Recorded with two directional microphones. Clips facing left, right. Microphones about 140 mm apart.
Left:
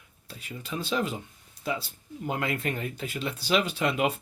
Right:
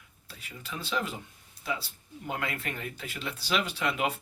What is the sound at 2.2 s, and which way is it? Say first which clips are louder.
Speech: left 5 dB; 25° left (ahead or behind).